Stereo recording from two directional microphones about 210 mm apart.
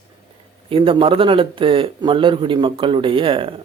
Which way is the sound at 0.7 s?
25° right (ahead or behind).